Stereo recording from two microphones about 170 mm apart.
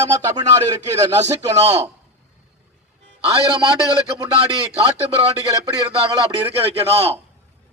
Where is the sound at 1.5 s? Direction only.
40° right (ahead or behind).